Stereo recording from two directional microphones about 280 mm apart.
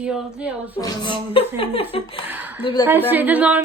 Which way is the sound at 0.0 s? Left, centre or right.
Centre.